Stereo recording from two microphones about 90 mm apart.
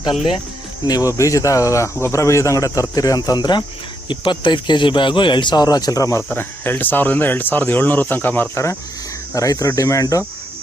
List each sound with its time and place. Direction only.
0.9 s speech: 40° left (ahead or behind)
4.1 s a man's voice: 60° left (ahead or behind); by 6.2 s 35° left (ahead or behind)
6.2 s speech: 20° left (ahead or behind)
9.3 s speech: 40° left (ahead or behind)